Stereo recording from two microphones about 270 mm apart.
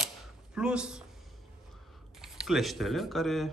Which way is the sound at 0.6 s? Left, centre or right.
Centre.